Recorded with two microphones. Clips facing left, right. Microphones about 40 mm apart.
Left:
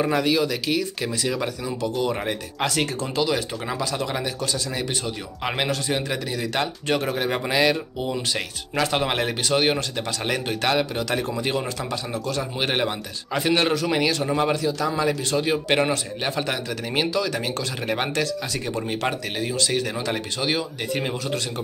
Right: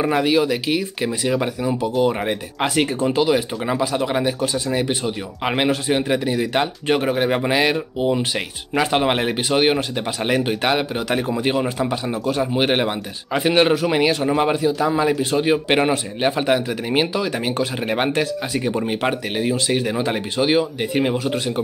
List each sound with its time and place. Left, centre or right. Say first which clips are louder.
0.0 s speech: right 3 dB; right